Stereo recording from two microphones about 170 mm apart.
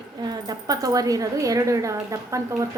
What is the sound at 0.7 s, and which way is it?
A woman's voice, 20° right (ahead or behind).